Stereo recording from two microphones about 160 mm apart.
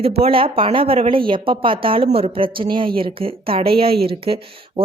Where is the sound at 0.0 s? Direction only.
35° right (ahead or behind).